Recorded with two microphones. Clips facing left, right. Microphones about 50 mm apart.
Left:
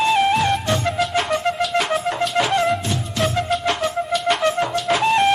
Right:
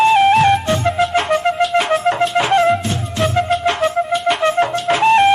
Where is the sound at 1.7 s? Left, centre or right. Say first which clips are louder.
Right 5 dB; centre.